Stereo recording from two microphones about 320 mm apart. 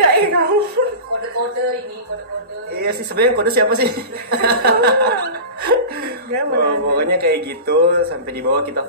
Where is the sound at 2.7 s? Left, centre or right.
Right.